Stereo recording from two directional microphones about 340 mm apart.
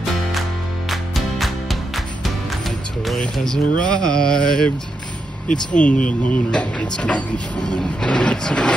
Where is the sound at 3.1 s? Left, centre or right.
Centre; by 6.1 s left.